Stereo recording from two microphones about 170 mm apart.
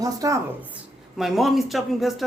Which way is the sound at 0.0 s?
20° right (ahead or behind).